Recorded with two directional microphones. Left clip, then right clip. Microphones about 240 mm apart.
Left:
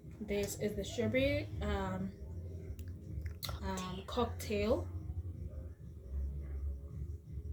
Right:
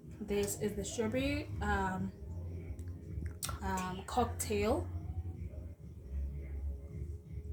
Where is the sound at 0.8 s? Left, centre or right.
Right.